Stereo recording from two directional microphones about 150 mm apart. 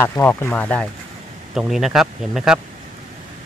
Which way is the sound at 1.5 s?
Centre (ahead or behind).